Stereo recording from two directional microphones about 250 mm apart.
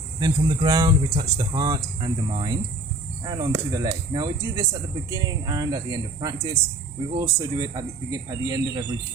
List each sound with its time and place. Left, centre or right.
0.2 s speech: centre